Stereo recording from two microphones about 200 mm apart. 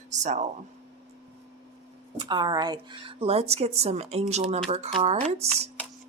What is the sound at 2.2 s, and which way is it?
Speech, 20° right (ahead or behind).